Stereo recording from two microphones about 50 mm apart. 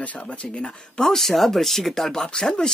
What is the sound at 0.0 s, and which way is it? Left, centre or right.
Speech, left.